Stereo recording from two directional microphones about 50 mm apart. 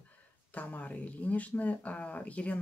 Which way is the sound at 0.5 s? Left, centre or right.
Left.